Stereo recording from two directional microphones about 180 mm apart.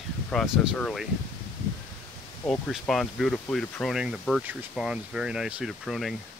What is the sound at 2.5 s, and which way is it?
Speech, centre (ahead or behind).